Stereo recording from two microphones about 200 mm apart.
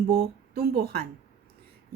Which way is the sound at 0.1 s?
50° right (ahead or behind).